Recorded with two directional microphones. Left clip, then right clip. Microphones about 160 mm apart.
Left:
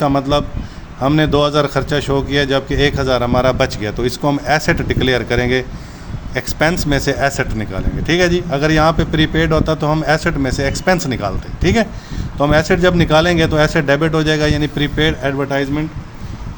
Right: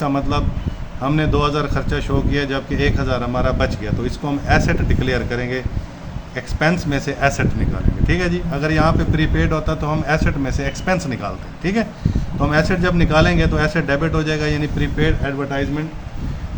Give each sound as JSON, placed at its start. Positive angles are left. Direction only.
{"t": 0.0, "sound": "a man's voice", "side_deg": 50}